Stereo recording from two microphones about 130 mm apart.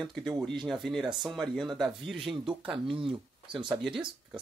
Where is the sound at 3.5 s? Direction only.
Centre (ahead or behind).